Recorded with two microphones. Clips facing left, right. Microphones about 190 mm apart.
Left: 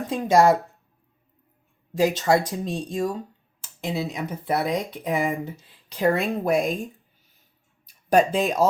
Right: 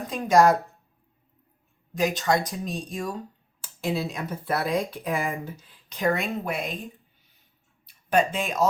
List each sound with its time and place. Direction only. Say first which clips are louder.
0.1 s speech: left 1 dB; 25° left (ahead or behind)
1.9 s speech: left 4 dB; 30° left (ahead or behind); by 6.7 s 45° left (ahead or behind)
7.9 s speech: left 4 dB; 40° left (ahead or behind)